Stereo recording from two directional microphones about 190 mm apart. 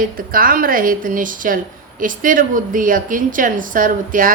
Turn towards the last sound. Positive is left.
turn(degrees=-45)  # may be behind; listen again after turning